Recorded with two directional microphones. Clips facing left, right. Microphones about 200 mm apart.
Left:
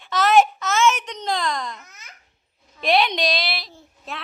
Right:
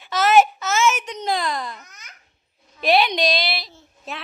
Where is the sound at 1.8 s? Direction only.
5° left (ahead or behind).